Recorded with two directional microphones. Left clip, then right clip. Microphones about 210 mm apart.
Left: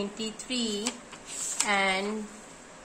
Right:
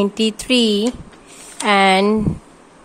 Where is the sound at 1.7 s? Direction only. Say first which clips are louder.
Right 14 dB; 50° right (ahead or behind).